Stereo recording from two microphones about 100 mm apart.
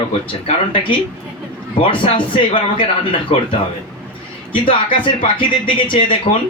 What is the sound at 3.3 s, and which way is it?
Speech, 75° left (ahead or behind).